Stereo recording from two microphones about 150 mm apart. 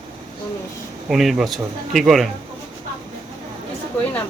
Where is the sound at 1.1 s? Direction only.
Centre (ahead or behind).